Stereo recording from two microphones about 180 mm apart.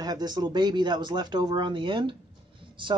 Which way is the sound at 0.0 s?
20° right (ahead or behind).